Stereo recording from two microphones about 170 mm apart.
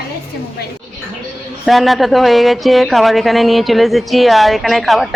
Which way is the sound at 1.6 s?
Centre (ahead or behind).